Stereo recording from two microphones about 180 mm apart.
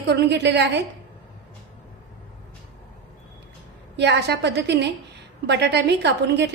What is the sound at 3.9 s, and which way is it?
A woman's voice, 70° right (ahead or behind).